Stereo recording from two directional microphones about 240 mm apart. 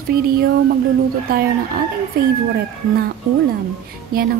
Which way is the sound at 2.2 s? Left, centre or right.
Right.